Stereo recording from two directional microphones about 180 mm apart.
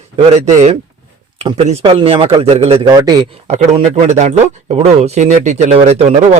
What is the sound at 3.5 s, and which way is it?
Speech, 35° right (ahead or behind).